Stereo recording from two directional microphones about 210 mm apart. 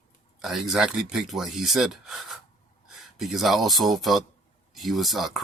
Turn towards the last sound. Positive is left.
turn(degrees=0)  # may be behind; listen again after turning